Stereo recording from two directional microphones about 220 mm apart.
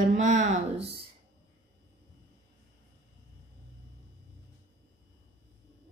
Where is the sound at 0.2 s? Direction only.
35° right (ahead or behind).